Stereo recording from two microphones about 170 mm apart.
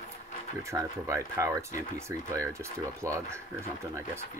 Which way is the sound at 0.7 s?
15° right (ahead or behind).